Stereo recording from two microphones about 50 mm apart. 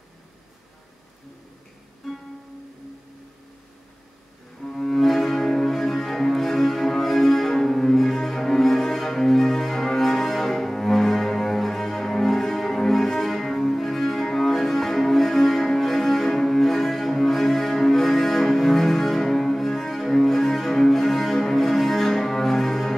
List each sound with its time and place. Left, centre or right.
2.0 s music: centre
4.6 s cello: centre